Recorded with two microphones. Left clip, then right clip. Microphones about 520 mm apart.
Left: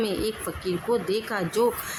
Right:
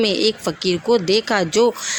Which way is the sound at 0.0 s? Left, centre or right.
Left.